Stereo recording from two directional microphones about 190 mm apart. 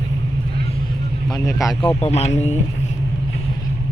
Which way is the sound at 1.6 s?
15° left (ahead or behind).